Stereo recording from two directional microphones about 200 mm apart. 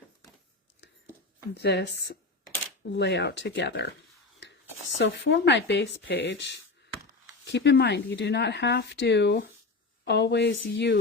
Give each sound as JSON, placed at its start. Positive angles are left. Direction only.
{"t": 1.5, "sound": "speech", "side_deg": 55}
{"t": 2.9, "sound": "speech", "side_deg": 60}
{"t": 4.9, "sound": "speech", "side_deg": 60}